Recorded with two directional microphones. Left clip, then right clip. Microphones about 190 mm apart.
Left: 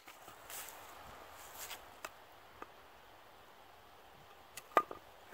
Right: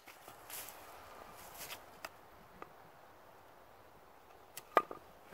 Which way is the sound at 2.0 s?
5° right (ahead or behind).